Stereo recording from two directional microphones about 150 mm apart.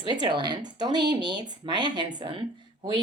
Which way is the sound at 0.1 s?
30° right (ahead or behind).